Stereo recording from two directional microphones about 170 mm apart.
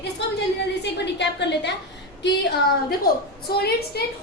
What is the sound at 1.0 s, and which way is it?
Speech, 90° left.